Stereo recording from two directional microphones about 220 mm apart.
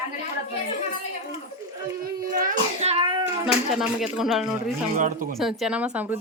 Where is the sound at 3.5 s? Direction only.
Centre (ahead or behind).